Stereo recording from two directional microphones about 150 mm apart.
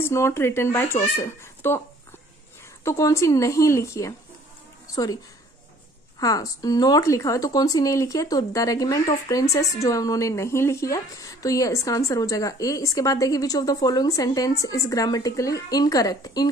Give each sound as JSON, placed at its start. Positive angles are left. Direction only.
{"t": 0.0, "sound": "speech", "side_deg": 20}
{"t": 2.8, "sound": "speech", "side_deg": 20}